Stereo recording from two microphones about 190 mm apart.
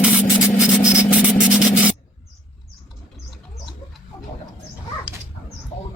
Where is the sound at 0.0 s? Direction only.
5° right (ahead or behind).